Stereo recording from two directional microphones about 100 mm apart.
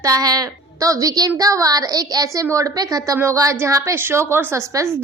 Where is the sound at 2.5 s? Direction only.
30° right (ahead or behind).